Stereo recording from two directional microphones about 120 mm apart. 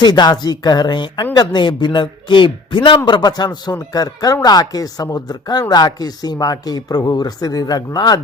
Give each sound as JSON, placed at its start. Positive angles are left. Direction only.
{"t": 0.0, "sound": "speech", "side_deg": 35}